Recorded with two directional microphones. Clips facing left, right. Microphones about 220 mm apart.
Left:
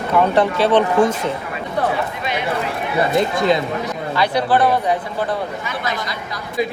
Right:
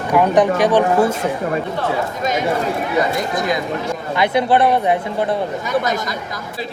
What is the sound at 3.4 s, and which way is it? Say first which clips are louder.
Speech: left 3 dB; 25° left (ahead or behind).